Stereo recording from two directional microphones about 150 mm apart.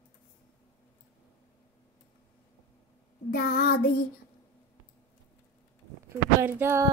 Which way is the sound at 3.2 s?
90° left.